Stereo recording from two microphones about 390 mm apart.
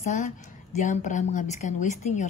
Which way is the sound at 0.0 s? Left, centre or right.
Centre.